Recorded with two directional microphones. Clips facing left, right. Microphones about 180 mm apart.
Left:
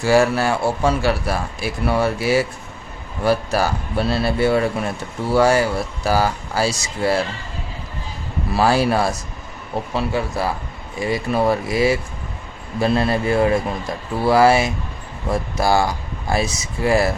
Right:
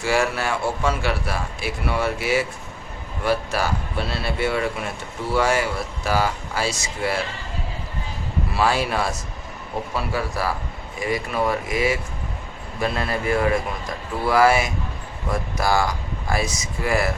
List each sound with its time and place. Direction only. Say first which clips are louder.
0.0 s speech: left 6 dB; 35° left (ahead or behind)
8.5 s speech: left 5 dB; 40° left (ahead or behind)
9.9 s a man's voice: left 4 dB; 25° left (ahead or behind)